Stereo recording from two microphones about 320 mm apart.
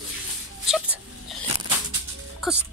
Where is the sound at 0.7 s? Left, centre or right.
Centre.